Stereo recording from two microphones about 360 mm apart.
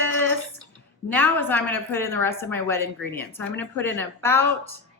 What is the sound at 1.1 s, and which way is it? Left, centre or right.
A woman's voice, centre.